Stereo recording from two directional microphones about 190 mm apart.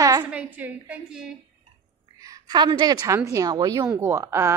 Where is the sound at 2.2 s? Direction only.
20° right (ahead or behind).